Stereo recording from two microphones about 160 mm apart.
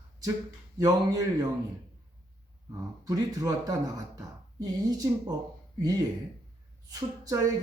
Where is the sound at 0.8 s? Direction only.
25° right (ahead or behind).